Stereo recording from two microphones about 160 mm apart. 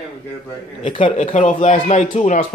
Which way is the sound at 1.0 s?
50° left (ahead or behind).